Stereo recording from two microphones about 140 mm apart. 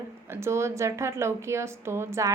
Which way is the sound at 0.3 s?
20° right (ahead or behind).